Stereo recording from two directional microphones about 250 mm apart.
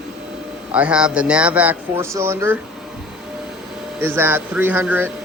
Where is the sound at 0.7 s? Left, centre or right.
Centre.